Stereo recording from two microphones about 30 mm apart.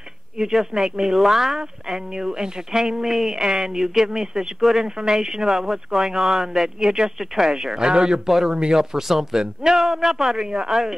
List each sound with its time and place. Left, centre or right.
0.4 s speech: centre
2.0 s speech: right
3.8 s speech: centre
4.6 s speech: centre
4.8 s speech: right
8.3 s speech: centre
8.5 s speech: right
8.9 s speech: centre
9.4 s speech: right
9.8 s speech: centre
10.4 s speech: right
10.7 s speech: centre